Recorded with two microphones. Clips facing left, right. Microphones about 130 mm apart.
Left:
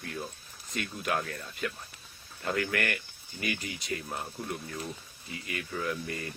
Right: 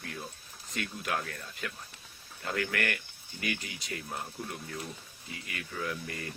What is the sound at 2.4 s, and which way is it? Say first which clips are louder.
Speech: left 2 dB; 15° left (ahead or behind).